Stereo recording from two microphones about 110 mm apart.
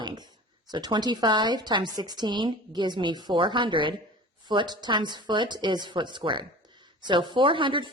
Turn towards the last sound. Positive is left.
turn(degrees=-50)  # may be behind; listen again after turning